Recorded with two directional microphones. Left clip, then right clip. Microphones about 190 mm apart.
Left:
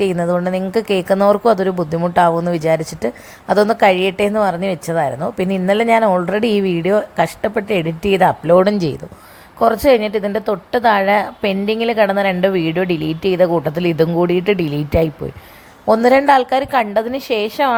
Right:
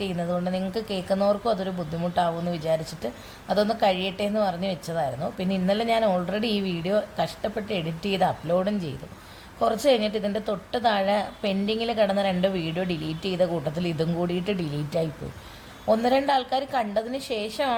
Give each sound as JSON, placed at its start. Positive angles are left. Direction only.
{"t": 0.1, "sound": "speech", "side_deg": 35}
{"t": 6.4, "sound": "a woman's voice", "side_deg": 90}
{"t": 6.8, "sound": "a woman's voice", "side_deg": 35}
{"t": 15.9, "sound": "speech", "side_deg": 45}